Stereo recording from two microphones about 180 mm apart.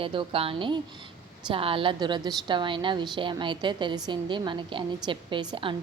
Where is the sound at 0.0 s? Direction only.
30° right (ahead or behind).